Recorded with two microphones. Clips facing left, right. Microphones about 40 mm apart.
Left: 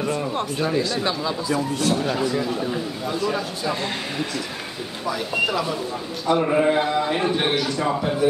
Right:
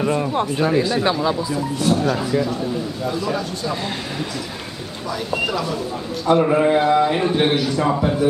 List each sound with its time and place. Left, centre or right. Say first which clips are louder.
0.0 s speech: right 4 dB; right
1.8 s a man's voice: right 3 dB; centre
5.0 s speech: even; centre
6.2 s a sound: right 3 dB; centre
7.2 s a man's voice: right 3 dB; centre